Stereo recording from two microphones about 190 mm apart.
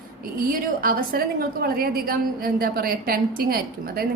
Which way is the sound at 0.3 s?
50° right (ahead or behind).